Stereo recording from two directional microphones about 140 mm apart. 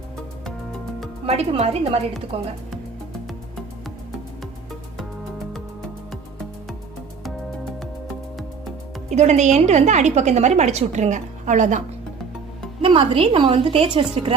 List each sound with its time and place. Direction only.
1.3 s a woman's voice: 45° right (ahead or behind)
9.0 s a woman's voice: 55° right (ahead or behind)
12.8 s a woman's voice: 40° right (ahead or behind)